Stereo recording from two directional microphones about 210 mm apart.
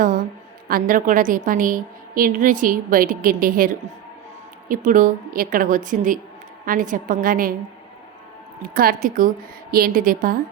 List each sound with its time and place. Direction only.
0.7 s a woman's voice: 40° right (ahead or behind)
4.7 s a woman's voice: 40° right (ahead or behind)
8.7 s a woman's voice: 45° right (ahead or behind)